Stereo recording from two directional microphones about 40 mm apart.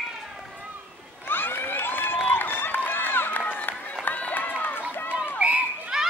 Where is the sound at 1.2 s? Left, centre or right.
Left.